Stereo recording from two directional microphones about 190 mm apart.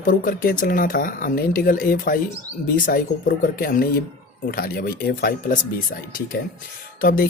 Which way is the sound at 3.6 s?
50° left (ahead or behind).